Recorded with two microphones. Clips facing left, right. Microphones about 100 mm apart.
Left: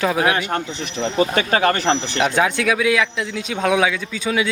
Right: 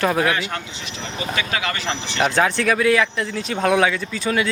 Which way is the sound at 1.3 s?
45° left (ahead or behind).